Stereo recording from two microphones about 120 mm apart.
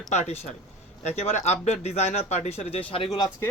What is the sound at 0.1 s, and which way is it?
Speech, 70° left (ahead or behind).